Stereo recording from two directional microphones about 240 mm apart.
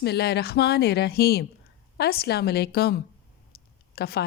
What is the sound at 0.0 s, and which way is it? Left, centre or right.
A woman's voice, left.